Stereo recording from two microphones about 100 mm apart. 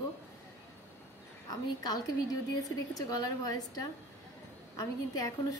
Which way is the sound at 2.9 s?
35° left (ahead or behind).